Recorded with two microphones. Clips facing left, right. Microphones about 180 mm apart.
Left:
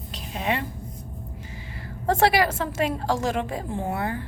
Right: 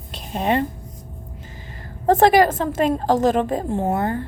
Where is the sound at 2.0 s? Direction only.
45° right (ahead or behind).